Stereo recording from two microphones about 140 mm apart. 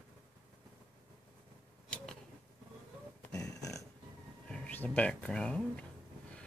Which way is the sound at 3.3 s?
25° left (ahead or behind).